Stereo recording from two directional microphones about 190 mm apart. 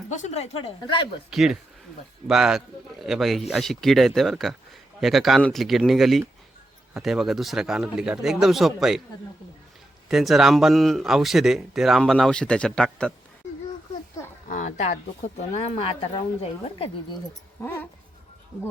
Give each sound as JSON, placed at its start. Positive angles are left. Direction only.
{"t": 0.1, "sound": "speech", "side_deg": 35}
{"t": 1.3, "sound": "speech", "side_deg": 0}
{"t": 10.1, "sound": "speech", "side_deg": 0}
{"t": 14.5, "sound": "speech", "side_deg": 40}
{"t": 17.6, "sound": "speech", "side_deg": 10}